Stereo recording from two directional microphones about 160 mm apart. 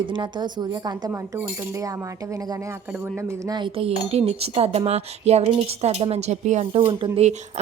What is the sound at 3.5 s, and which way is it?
A woman's voice, 30° right (ahead or behind).